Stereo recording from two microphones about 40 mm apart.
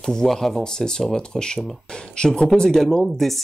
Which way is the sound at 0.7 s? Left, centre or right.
Centre.